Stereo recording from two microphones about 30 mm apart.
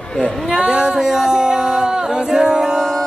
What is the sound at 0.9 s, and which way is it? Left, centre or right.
A capella, centre.